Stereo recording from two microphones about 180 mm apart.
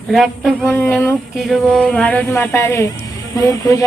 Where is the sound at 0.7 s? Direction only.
10° left (ahead or behind).